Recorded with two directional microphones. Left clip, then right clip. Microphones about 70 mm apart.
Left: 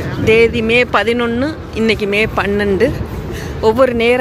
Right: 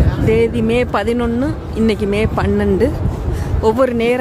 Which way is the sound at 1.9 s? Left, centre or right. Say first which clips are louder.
Left 3 dB; right.